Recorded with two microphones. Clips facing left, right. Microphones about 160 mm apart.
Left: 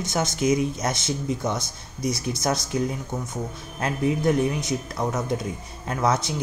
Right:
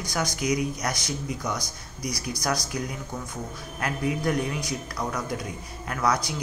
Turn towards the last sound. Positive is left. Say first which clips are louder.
# left 2 dB
turn(degrees=25)  # may be behind; listen again after turning